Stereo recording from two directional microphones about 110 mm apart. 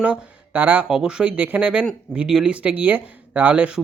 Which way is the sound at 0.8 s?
5° right (ahead or behind).